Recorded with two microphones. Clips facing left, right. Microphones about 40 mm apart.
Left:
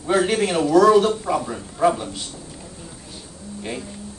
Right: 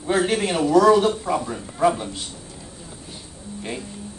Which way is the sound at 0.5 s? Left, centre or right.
Centre.